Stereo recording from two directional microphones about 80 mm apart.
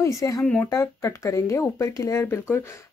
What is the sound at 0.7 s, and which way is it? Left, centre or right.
Speech, left.